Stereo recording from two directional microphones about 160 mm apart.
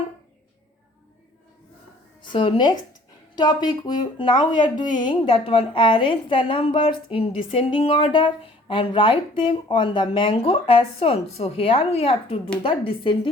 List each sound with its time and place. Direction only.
2.2 s speech: 30° left (ahead or behind)